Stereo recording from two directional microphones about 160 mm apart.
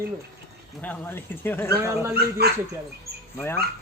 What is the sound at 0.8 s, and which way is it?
Speech, 10° left (ahead or behind).